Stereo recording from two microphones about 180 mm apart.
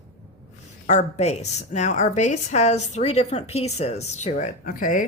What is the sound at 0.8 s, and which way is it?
A woman's voice, 40° left (ahead or behind).